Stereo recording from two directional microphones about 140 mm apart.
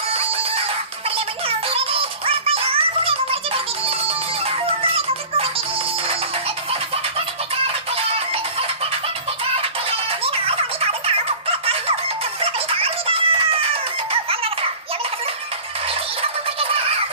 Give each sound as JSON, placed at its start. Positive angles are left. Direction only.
{"t": 1.7, "sound": "music", "side_deg": -40}
{"t": 6.7, "sound": "music", "side_deg": -45}
{"t": 9.6, "sound": "music", "side_deg": -45}
{"t": 12.4, "sound": "a sound", "side_deg": -40}
{"t": 14.1, "sound": "music", "side_deg": -40}